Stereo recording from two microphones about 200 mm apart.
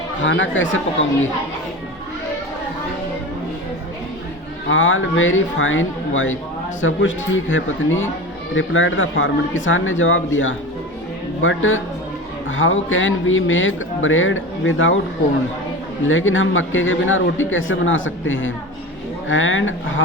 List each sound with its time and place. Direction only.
0.2 s a man's voice: 70° left (ahead or behind)
4.7 s a man's voice: 70° left (ahead or behind)
16.0 s a man's voice: 75° left (ahead or behind)